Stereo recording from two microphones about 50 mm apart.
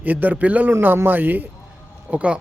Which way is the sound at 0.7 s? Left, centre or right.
Right.